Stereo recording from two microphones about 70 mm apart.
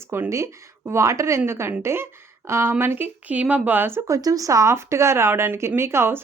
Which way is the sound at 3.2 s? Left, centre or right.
Right.